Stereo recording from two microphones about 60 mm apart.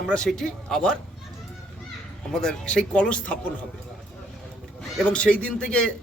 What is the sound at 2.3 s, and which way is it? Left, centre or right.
Speech, centre.